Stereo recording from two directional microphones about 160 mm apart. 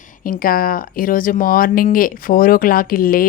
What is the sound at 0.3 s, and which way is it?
A woman's voice, 65° left (ahead or behind).